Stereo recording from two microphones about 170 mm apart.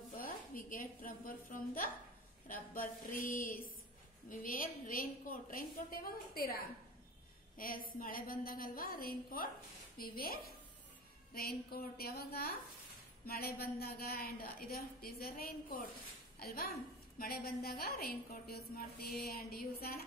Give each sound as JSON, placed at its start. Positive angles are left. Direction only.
{"t": 0.2, "sound": "a woman's voice", "side_deg": 55}